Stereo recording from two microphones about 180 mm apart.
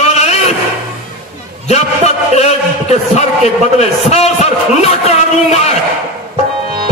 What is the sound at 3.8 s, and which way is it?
Speech, 35° left (ahead or behind).